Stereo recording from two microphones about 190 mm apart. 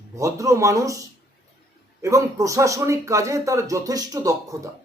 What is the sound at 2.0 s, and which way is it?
A man's voice, 15° right (ahead or behind).